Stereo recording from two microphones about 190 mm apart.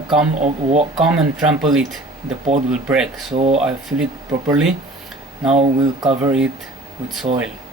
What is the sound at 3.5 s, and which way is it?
Speech, 5° right (ahead or behind).